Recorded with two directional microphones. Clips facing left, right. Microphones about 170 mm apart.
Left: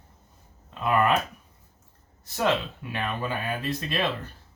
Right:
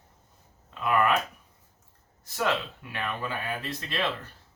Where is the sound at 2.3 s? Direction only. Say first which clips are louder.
Left 3 dB; 25° left (ahead or behind).